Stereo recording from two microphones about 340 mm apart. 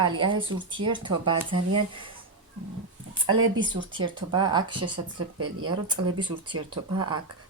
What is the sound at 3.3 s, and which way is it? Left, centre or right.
Speech, centre.